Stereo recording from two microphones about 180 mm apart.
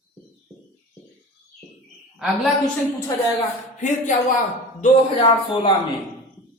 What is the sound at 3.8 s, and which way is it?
Speech, 45° left (ahead or behind).